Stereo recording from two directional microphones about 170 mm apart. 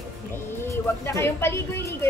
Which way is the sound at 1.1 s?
15° left (ahead or behind).